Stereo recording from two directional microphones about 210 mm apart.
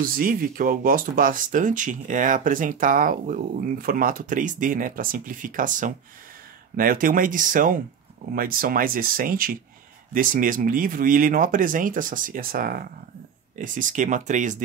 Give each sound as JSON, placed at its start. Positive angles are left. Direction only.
{"t": 0.0, "sound": "speech", "side_deg": -40}